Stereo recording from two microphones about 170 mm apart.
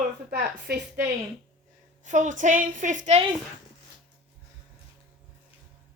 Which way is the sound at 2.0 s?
45° right (ahead or behind).